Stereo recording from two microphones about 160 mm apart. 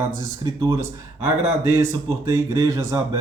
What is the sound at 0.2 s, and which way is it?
Speech, 25° right (ahead or behind).